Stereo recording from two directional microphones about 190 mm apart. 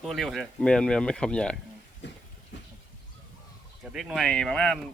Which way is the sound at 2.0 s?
65° left (ahead or behind).